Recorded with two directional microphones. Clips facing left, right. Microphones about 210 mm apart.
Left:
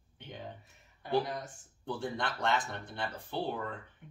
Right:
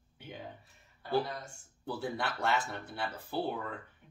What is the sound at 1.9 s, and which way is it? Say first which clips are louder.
Speech: even; 5° right (ahead or behind).